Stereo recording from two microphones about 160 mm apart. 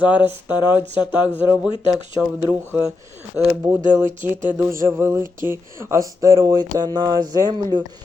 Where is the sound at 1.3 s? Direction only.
5° right (ahead or behind).